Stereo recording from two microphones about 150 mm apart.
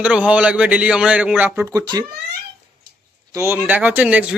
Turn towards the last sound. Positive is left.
turn(degrees=-10)  # may be behind; listen again after turning